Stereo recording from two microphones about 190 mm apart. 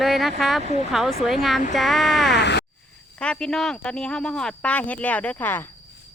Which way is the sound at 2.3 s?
65° left (ahead or behind).